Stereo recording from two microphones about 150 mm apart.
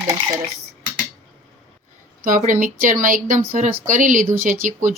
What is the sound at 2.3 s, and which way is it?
Speech, 65° right (ahead or behind).